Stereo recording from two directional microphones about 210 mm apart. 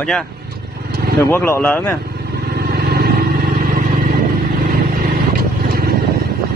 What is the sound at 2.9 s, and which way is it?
Vehicle, 45° right (ahead or behind).